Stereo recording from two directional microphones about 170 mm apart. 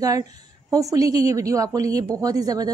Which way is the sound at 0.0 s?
20° right (ahead or behind).